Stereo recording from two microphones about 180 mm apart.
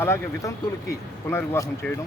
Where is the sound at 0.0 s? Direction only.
15° left (ahead or behind).